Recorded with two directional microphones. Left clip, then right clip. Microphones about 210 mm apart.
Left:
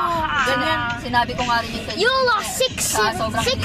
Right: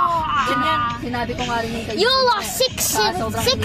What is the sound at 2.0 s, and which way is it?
Speech, 10° right (ahead or behind).